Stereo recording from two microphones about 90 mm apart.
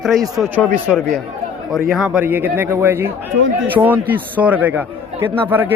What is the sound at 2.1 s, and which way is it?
A man's voice, 20° right (ahead or behind).